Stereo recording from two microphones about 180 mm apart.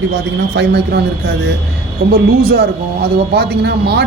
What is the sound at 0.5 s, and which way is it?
Speech, 70° right (ahead or behind).